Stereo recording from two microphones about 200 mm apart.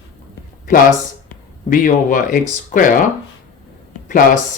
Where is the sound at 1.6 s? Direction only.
40° left (ahead or behind).